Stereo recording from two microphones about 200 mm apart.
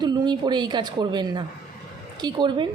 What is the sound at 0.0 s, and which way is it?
A woman's voice, 20° right (ahead or behind).